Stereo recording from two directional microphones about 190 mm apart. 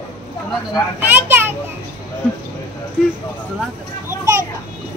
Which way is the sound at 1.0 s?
10° right (ahead or behind).